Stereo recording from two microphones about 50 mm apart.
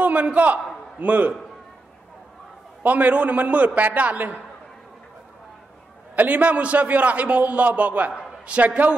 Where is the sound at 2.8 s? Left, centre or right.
Right.